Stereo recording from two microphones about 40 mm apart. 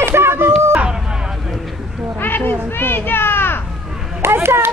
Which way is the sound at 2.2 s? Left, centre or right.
Left.